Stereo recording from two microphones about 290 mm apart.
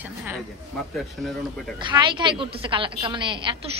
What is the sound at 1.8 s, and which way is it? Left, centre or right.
A woman's voice, centre.